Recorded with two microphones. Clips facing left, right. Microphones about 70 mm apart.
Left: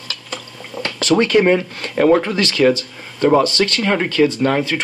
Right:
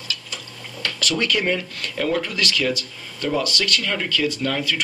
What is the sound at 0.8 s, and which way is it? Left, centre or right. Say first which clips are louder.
Speech: left 7 dB; left.